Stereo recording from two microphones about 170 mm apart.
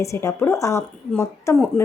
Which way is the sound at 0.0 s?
15° left (ahead or behind).